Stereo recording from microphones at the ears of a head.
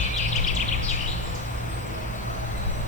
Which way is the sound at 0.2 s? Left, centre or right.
Left.